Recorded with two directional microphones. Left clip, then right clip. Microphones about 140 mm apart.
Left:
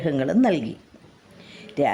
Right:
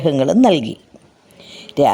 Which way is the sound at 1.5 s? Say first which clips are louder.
Right 8 dB; 45° right (ahead or behind).